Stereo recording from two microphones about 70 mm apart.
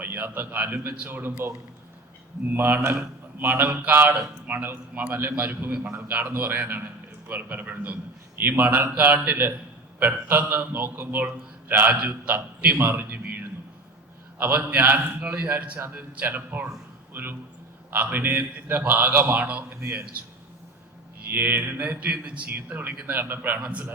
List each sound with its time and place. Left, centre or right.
0.0 s a man's voice: right
2.5 s a man's voice: right
21.2 s mantra: right
21.5 s a man's voice: right
23.6 s a man's voice: centre